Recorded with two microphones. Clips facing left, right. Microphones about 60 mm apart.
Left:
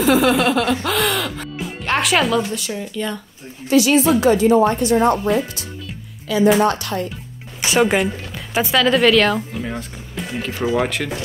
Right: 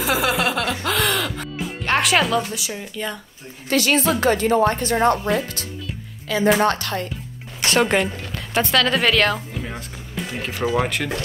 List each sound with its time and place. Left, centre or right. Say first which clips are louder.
0.0 s speech: left 5 dB; centre
3.6 s speech: left 5 dB; right
6.2 s speech: left 3 dB; right
7.6 s speech: left 2 dB; centre